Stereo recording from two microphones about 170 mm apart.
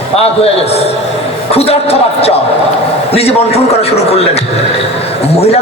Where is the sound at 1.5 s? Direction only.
35° left (ahead or behind).